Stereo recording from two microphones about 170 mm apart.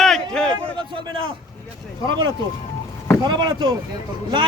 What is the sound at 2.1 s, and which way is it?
Speech, 25° right (ahead or behind).